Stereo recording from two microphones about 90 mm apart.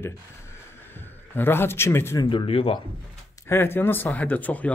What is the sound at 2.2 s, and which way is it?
Speech, 80° left.